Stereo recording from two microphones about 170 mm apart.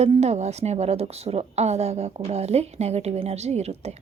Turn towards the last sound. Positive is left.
turn(degrees=-40)  # may be behind; listen again after turning